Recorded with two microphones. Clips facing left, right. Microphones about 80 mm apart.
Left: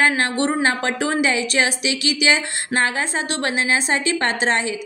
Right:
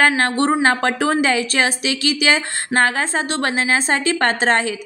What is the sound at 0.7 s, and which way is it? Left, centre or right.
Speech, right.